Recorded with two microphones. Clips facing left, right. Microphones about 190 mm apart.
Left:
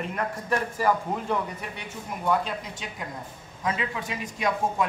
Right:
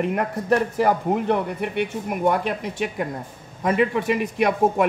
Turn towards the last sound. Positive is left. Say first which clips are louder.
# right 7 dB
turn(degrees=-60)  # may be behind; listen again after turning